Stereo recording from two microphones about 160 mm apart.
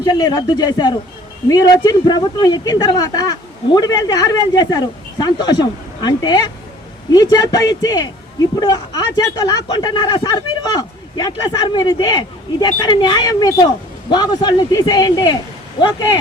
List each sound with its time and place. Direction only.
0.0 s speech: 25° left (ahead or behind)